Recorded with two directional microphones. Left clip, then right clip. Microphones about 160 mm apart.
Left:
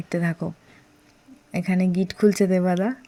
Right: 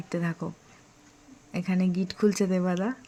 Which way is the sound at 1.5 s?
25° left (ahead or behind).